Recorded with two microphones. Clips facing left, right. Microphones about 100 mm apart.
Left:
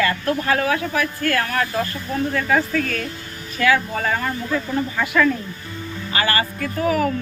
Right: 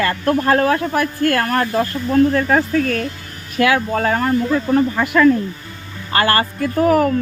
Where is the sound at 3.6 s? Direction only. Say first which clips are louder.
Right 3 dB; 55° right (ahead or behind).